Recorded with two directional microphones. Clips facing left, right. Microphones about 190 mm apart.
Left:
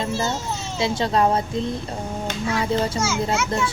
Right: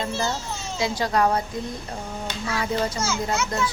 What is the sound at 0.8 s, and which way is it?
Speech, 25° left (ahead or behind).